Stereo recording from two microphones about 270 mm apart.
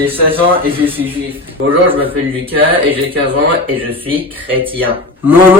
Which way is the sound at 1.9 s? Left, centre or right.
Centre.